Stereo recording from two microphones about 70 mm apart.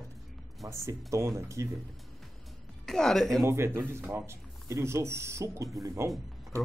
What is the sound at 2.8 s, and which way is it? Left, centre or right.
Speech, centre.